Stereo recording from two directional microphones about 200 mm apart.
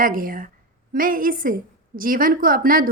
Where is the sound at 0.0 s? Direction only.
45° right (ahead or behind).